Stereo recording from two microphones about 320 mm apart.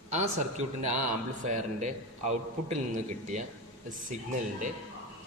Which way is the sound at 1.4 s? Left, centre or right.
Right.